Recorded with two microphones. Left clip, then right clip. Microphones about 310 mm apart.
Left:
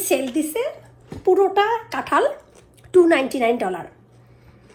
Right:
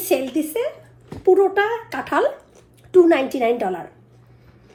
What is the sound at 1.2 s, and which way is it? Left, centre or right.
Speech, left.